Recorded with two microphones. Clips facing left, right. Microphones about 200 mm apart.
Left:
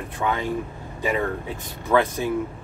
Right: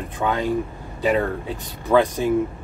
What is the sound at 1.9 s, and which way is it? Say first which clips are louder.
Speech: right 3 dB; 15° right (ahead or behind).